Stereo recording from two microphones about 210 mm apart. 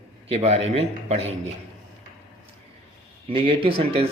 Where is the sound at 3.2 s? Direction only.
25° right (ahead or behind).